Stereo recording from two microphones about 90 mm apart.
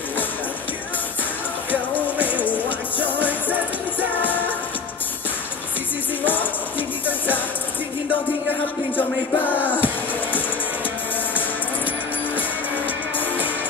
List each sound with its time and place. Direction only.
2.2 s music: 20° left (ahead or behind)
6.2 s music: 20° left (ahead or behind)
8.9 s music: 20° left (ahead or behind)